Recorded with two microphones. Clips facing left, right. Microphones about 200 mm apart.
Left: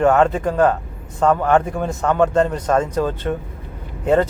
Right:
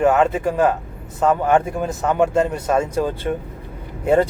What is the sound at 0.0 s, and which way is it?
Speech, 5° right (ahead or behind).